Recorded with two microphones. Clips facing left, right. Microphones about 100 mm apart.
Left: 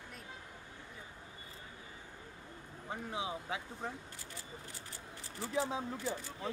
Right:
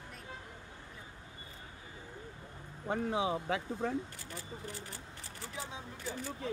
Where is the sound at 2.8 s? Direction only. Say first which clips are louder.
Right 7 dB; 70° right (ahead or behind).